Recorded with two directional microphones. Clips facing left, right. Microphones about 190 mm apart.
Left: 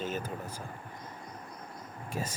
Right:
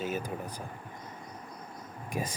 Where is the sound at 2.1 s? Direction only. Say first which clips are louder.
Right 2 dB; 15° right (ahead or behind).